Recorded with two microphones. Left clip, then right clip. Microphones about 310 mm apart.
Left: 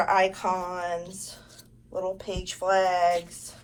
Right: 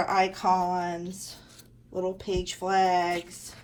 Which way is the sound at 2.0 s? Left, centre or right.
Right.